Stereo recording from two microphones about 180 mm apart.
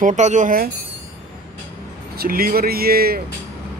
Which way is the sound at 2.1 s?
55° right (ahead or behind).